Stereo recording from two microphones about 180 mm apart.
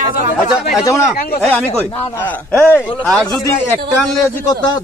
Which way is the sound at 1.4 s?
10° left (ahead or behind).